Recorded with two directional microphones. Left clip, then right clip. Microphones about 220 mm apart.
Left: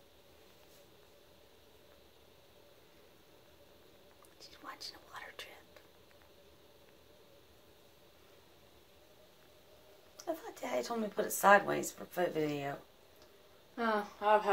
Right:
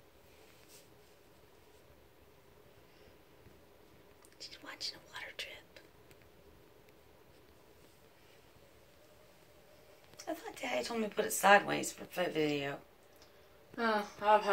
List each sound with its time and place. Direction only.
4.4 s speech: 10° left (ahead or behind)
10.2 s speech: centre (ahead or behind)
13.7 s speech: 25° right (ahead or behind)